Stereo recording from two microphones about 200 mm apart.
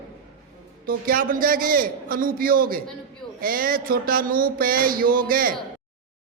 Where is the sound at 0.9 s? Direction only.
45° right (ahead or behind).